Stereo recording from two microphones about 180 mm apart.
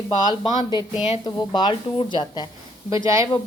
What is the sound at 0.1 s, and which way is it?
Speech, 25° left (ahead or behind).